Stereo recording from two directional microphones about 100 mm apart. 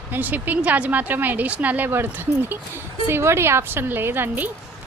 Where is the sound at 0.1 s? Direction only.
15° right (ahead or behind).